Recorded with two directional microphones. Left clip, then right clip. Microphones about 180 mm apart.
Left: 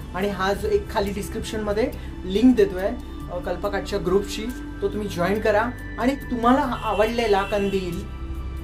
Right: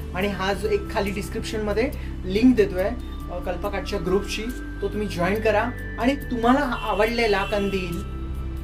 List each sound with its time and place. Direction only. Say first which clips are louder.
0.1 s speech: left 1 dB; 10° left (ahead or behind)
3.4 s speech: left 2 dB; 20° left (ahead or behind)
5.0 s speech: even; 15° left (ahead or behind)